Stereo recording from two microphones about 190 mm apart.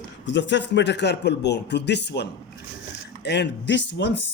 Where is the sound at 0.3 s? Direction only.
65° left (ahead or behind).